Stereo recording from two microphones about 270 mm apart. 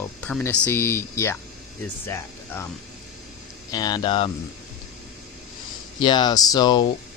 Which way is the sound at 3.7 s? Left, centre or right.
Centre.